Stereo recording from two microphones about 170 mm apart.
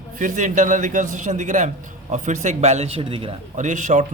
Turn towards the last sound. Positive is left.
turn(degrees=-45)  # may be behind; listen again after turning